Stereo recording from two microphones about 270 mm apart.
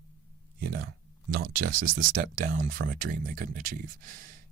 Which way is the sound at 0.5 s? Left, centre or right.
Right.